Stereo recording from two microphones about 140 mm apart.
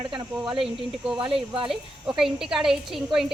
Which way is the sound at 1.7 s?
Centre (ahead or behind).